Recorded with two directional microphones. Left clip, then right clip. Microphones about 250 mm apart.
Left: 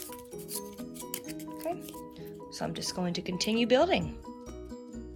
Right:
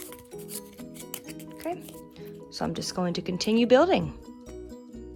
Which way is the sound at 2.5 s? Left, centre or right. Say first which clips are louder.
Right 4 dB; right.